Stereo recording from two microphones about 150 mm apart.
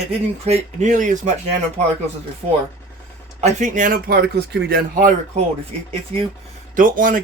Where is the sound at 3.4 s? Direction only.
55° right (ahead or behind).